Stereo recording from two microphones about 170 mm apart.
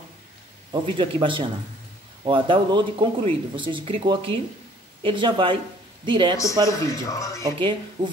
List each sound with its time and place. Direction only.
0.7 s speech: 30° right (ahead or behind)
6.7 s speech: 20° left (ahead or behind)
7.4 s speech: 30° right (ahead or behind)